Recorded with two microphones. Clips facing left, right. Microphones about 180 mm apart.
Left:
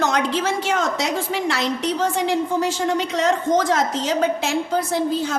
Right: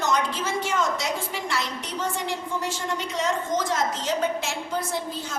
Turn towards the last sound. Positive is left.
turn(degrees=85)